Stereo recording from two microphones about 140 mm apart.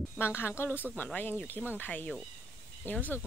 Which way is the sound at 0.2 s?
15° left (ahead or behind).